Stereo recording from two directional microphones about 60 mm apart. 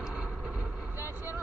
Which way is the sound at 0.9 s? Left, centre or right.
Right.